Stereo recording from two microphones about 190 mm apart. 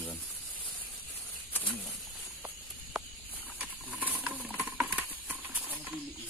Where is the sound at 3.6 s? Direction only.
10° right (ahead or behind).